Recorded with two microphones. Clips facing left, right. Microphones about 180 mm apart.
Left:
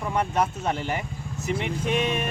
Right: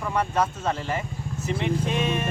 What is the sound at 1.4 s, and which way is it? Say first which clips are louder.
Speech: right 1 dB; 20° left (ahead or behind).